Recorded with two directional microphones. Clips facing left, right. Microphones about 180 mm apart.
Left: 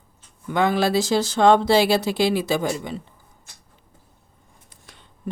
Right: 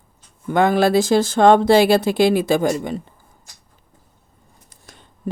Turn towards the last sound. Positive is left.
turn(degrees=-45)  # may be behind; listen again after turning